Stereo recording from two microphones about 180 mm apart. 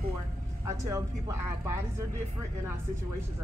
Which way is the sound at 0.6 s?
15° right (ahead or behind).